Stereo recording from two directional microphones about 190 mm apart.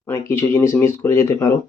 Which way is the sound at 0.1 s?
15° left (ahead or behind).